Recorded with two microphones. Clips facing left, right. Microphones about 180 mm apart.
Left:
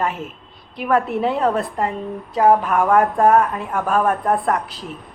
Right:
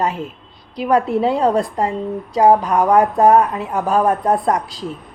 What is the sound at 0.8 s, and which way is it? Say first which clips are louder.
A woman's voice: right 3 dB; 25° right (ahead or behind).